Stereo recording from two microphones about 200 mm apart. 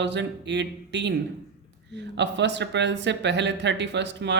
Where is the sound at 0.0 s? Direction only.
60° right (ahead or behind).